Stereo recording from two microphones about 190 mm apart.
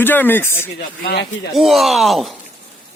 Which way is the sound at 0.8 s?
60° left (ahead or behind).